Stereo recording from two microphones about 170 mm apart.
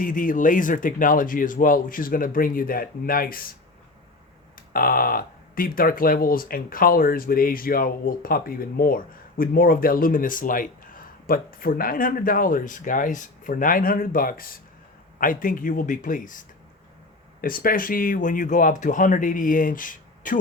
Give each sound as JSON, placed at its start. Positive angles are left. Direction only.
{"t": 0.0, "sound": "speech", "side_deg": 55}
{"t": 4.7, "sound": "speech", "side_deg": 55}
{"t": 17.4, "sound": "speech", "side_deg": 60}